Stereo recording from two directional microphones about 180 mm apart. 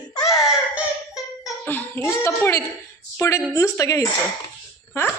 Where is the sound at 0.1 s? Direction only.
20° left (ahead or behind).